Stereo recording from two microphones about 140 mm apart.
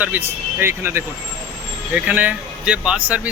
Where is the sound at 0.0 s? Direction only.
15° right (ahead or behind).